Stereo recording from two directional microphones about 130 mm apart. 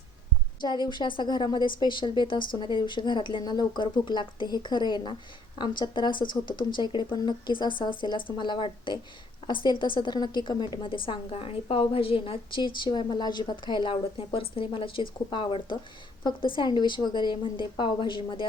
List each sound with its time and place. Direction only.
0.9 s speech: 40° left (ahead or behind)